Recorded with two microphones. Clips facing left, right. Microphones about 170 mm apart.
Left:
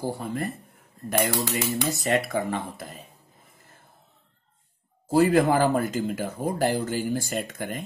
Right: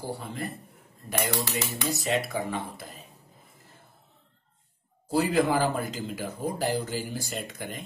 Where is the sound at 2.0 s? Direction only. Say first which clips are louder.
Left 3 dB; 50° left (ahead or behind).